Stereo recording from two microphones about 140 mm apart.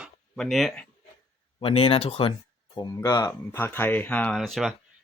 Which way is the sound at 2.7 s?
25° left (ahead or behind).